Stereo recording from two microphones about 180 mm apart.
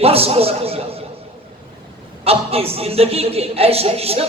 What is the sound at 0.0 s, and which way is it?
A man's voice, 35° right (ahead or behind).